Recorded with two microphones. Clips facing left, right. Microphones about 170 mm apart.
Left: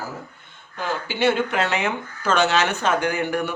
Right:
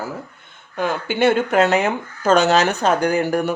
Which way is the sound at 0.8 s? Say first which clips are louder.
Right 5 dB; 50° right (ahead or behind).